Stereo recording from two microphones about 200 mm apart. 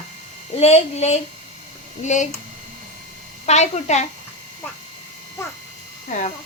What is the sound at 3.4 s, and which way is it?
Speech, 35° left (ahead or behind).